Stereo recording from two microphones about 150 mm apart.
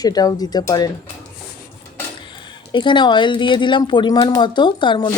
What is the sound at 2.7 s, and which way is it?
Speech, 30° left (ahead or behind).